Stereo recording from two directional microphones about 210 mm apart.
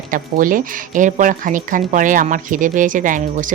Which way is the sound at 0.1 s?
40° right (ahead or behind).